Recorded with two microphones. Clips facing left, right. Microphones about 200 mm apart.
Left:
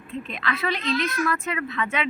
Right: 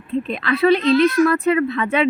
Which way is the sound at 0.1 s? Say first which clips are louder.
Right 9 dB; 35° right (ahead or behind).